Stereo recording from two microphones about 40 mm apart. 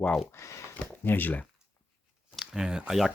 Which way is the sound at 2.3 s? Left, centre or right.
Centre.